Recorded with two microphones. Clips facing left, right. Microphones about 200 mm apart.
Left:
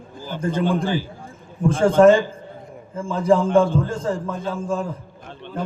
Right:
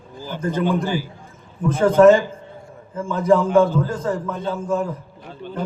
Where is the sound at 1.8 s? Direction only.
30° left (ahead or behind).